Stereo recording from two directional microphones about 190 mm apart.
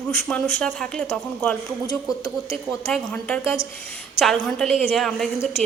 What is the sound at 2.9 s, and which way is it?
A woman's voice, 5° left (ahead or behind).